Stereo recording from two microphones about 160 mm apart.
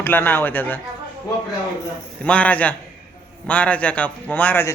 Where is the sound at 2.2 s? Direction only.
10° left (ahead or behind).